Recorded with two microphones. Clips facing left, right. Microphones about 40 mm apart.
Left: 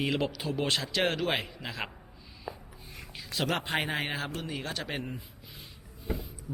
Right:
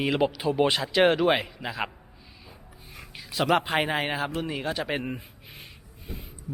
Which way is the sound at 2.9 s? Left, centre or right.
Centre.